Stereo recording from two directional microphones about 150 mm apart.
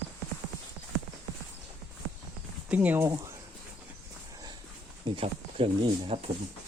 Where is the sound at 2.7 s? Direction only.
10° right (ahead or behind).